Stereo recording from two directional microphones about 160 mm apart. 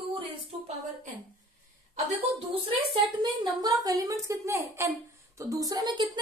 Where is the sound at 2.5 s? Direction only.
35° right (ahead or behind).